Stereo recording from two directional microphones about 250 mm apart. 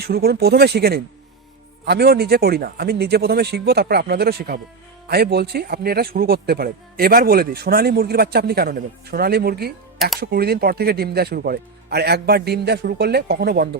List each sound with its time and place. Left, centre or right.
0.1 s speech: right